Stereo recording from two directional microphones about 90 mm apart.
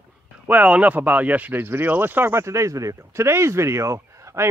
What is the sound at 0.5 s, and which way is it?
Speech, 15° right (ahead or behind).